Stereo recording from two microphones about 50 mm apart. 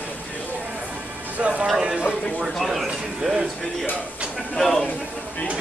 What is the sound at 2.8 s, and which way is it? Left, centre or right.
Speech, centre.